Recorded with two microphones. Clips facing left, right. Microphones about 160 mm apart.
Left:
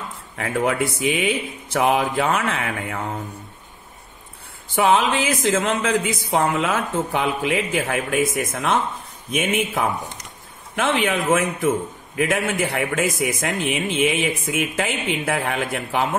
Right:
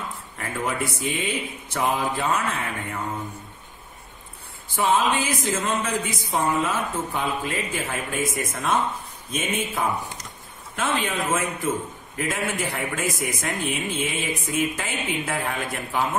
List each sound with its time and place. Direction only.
0.4 s speech: 80° left
4.7 s speech: 75° left (ahead or behind)
12.2 s speech: 75° left (ahead or behind)